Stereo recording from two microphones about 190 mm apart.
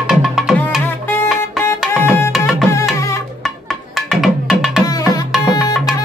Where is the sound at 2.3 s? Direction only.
Centre (ahead or behind).